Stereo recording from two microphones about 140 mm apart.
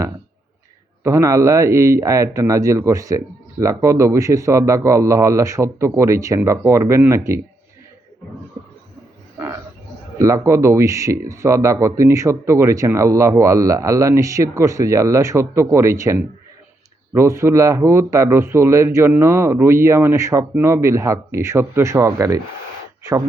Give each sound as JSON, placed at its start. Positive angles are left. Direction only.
{"t": 1.0, "sound": "speech", "side_deg": -20}
{"t": 10.2, "sound": "speech", "side_deg": -20}